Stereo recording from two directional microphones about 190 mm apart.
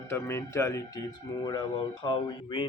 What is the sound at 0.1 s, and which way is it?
Speech, 15° left (ahead or behind).